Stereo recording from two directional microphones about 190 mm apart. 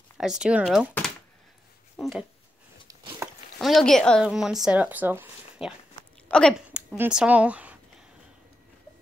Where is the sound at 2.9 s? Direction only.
20° right (ahead or behind).